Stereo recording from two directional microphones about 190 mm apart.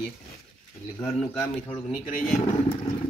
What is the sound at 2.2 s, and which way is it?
Speech, 40° left (ahead or behind).